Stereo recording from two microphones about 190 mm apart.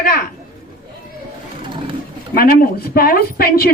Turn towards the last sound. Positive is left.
turn(degrees=50)  # may be behind; listen again after turning